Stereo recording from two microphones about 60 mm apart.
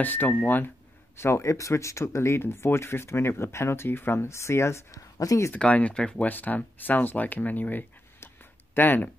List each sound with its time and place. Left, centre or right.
0.0 s speech: left
1.1 s speech: left
4.9 s speech: left
5.5 s speech: left
6.2 s speech: left